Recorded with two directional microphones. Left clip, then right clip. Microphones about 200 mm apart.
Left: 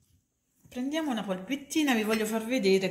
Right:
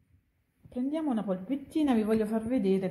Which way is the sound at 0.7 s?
35° right (ahead or behind).